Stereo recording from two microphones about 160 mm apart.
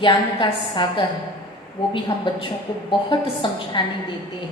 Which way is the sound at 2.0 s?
30° left (ahead or behind).